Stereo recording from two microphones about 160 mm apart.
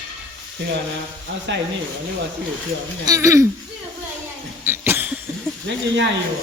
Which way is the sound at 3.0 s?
20° right (ahead or behind).